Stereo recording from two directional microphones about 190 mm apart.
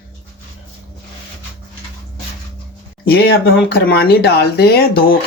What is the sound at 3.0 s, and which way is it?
Speech, 55° left (ahead or behind).